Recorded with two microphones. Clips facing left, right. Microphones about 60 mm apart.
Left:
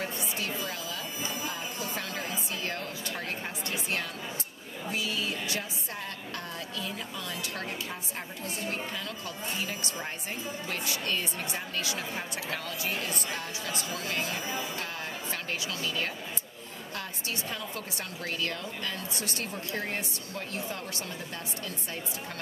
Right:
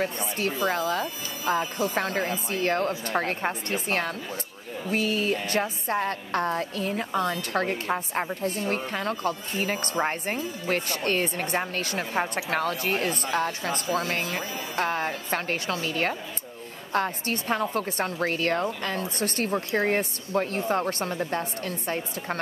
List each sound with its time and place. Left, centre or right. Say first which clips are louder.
0.0 s a woman's voice: right 7 dB; right